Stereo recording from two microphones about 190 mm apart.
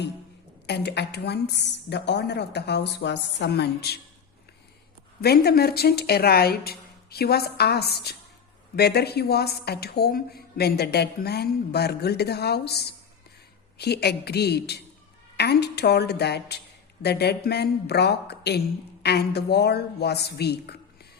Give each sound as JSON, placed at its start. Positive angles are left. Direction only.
{"t": 0.7, "sound": "a woman's voice", "side_deg": 60}
{"t": 5.2, "sound": "a woman's voice", "side_deg": 55}